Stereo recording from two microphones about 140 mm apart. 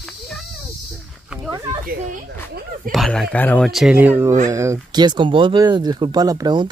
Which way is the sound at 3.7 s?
5° right (ahead or behind).